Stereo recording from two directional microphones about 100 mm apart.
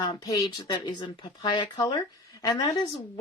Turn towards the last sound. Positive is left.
turn(degrees=50)  # may be behind; listen again after turning